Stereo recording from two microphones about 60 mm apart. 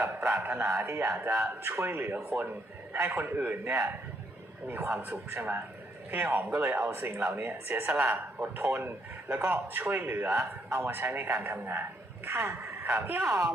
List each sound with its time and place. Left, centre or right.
0.3 s a man's voice: right
5.0 s a man's voice: right
7.7 s a man's voice: right
9.3 s a man's voice: right
10.2 s a man's voice: right